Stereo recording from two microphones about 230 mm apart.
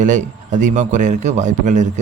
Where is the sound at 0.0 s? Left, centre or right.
Right.